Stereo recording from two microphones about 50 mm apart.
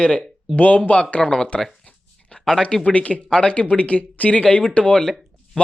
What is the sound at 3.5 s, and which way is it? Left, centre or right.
Speech, left.